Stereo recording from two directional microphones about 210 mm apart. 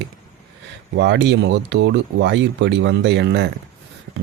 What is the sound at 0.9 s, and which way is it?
Speech, 55° right (ahead or behind).